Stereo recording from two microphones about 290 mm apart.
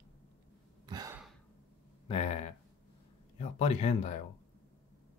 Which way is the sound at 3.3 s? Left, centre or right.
Left.